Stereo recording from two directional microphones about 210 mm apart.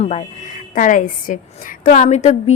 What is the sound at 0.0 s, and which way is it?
Speech, 30° left (ahead or behind).